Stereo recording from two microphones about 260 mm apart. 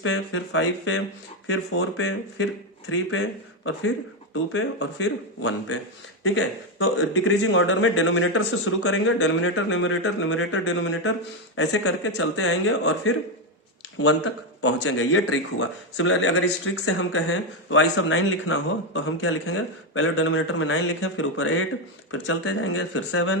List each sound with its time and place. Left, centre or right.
0.0 s speech: left